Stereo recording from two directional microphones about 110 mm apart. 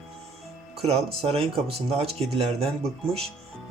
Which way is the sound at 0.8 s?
65° right (ahead or behind).